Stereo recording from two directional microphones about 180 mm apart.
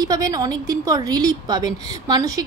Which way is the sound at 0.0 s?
20° right (ahead or behind).